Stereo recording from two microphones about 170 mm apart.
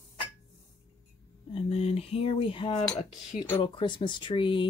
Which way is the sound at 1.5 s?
35° left (ahead or behind).